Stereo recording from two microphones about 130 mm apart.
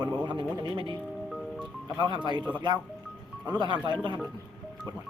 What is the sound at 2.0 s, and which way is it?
Speech, 35° right (ahead or behind).